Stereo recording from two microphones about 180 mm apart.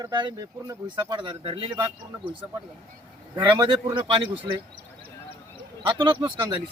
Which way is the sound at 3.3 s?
25° right (ahead or behind).